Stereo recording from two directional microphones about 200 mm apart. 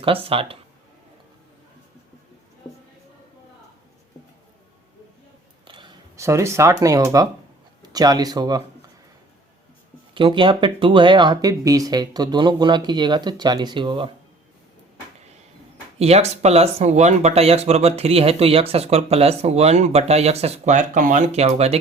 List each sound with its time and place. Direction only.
0.0 s speech: 25° right (ahead or behind)
5.6 s speech: 25° right (ahead or behind)
10.2 s speech: 25° right (ahead or behind)
16.0 s speech: 30° right (ahead or behind)